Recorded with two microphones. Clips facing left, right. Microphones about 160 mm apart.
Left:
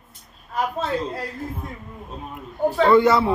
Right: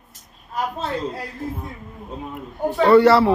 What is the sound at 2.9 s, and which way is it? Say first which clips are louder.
Speech: right 6 dB; 70° right (ahead or behind).